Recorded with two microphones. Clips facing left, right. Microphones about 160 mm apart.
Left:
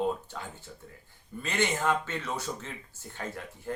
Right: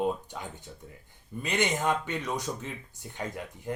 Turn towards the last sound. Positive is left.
turn(degrees=-15)  # may be behind; listen again after turning